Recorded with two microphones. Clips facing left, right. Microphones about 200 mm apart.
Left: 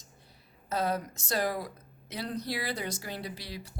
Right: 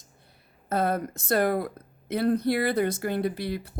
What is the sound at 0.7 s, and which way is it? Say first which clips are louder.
Speech: right 5 dB; 55° right (ahead or behind).